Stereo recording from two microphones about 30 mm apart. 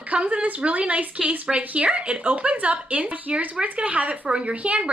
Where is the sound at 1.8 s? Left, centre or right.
Right.